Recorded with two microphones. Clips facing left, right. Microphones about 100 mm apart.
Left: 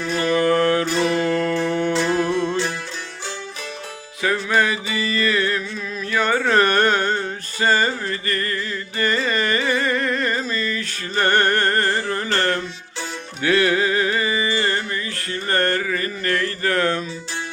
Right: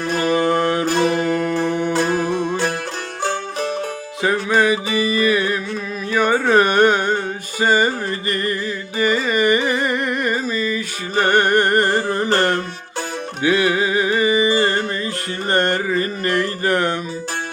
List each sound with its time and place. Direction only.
0.3 s music: 20° right (ahead or behind)
0.9 s music: 45° right (ahead or behind)
1.2 s music: 15° right (ahead or behind)
2.5 s music: 50° right (ahead or behind)
4.2 s music: 20° right (ahead or behind)
9.0 s carnatic music: 10° right (ahead or behind)
13.4 s music: 15° right (ahead or behind)